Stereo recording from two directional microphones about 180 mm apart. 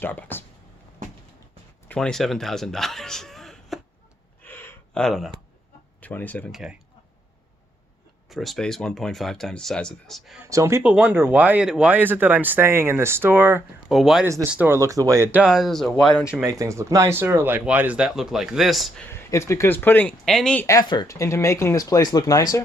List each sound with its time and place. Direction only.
0.0 s speech: 10° left (ahead or behind)
1.9 s a man's voice: 5° left (ahead or behind)
4.4 s a sound: 10° left (ahead or behind)
6.0 s speech: 10° left (ahead or behind)
8.3 s speech: centre (ahead or behind)
10.4 s speech: 15° right (ahead or behind); by 16.2 s 5° left (ahead or behind)
16.2 s speech: 10° right (ahead or behind)
19.0 s speech: 15° left (ahead or behind)
20.7 s speech: 20° left (ahead or behind)